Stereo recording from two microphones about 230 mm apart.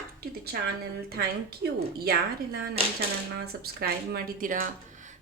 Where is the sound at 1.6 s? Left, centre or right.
Right.